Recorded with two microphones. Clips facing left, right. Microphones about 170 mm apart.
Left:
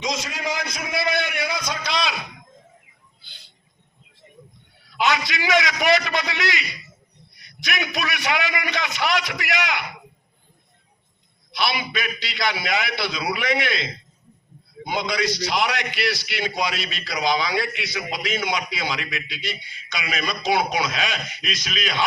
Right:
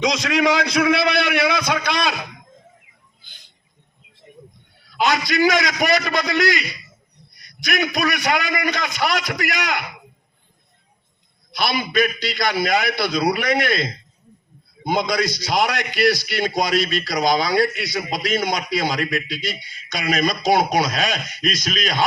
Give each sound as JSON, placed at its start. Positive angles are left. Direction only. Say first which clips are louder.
{"t": 0.0, "sound": "a man's voice", "louder": "right 9 dB", "side_deg": -75}
{"t": 4.9, "sound": "a man's voice", "louder": "right 4 dB", "side_deg": -40}
{"t": 11.5, "sound": "a man's voice", "louder": "right 5 dB", "side_deg": -45}